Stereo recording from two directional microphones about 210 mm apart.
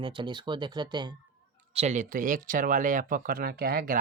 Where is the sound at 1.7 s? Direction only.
35° right (ahead or behind).